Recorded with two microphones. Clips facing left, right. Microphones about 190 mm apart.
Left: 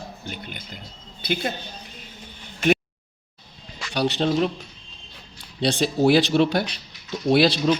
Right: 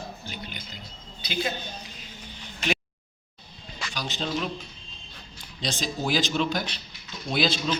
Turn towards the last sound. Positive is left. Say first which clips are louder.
# left 8 dB
turn(degrees=65)  # may be behind; listen again after turning